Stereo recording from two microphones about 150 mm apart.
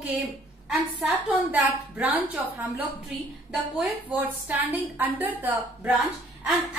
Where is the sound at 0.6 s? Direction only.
Centre (ahead or behind).